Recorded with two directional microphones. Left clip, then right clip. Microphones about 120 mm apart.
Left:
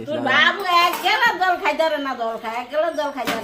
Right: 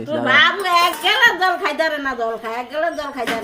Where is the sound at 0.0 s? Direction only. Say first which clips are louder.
Right 3 dB; 25° right (ahead or behind).